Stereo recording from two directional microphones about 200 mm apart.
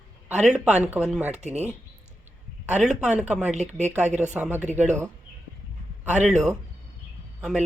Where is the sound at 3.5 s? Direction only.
35° right (ahead or behind).